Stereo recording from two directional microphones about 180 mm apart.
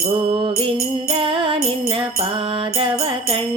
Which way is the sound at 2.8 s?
30° right (ahead or behind).